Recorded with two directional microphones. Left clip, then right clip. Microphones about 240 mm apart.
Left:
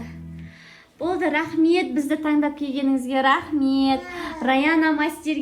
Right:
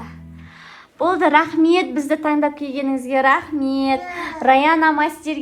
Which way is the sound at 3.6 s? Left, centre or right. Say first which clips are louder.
Right 1 dB; centre.